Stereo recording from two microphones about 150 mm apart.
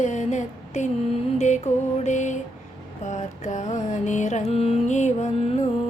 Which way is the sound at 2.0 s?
55° left (ahead or behind).